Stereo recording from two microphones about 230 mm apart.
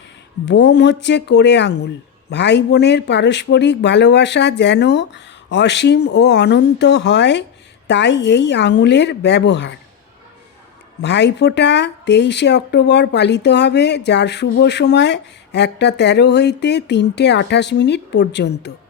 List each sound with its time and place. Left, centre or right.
0.4 s speech: left
11.0 s speech: left